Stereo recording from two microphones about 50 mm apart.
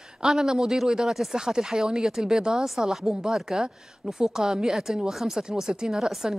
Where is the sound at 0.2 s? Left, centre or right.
Centre.